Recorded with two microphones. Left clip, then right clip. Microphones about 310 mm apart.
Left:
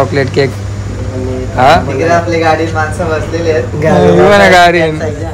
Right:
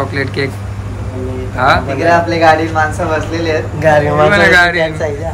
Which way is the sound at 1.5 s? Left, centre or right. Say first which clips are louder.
Left 5 dB; centre.